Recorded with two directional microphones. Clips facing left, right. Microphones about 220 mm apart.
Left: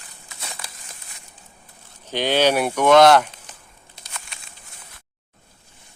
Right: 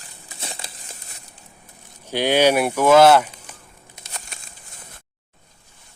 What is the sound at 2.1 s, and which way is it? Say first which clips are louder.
Speech: right 2 dB; 10° right (ahead or behind).